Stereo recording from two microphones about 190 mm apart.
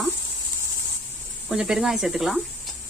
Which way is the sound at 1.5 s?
5° right (ahead or behind).